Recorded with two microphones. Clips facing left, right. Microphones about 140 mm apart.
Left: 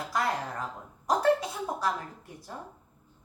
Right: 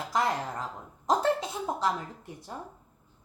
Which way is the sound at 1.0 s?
25° right (ahead or behind).